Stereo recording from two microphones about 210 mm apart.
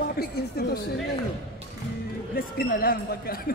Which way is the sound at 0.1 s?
45° left (ahead or behind).